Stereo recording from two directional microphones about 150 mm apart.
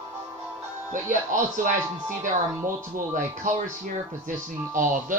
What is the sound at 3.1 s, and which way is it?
Speech, 60° right (ahead or behind).